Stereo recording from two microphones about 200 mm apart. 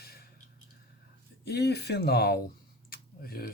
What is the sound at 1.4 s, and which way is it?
Speech, 55° left (ahead or behind).